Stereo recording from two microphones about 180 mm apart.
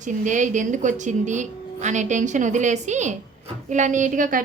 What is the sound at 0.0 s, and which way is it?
A woman's voice, 45° right (ahead or behind).